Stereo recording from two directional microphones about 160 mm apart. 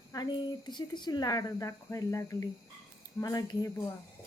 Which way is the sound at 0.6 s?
30° left (ahead or behind).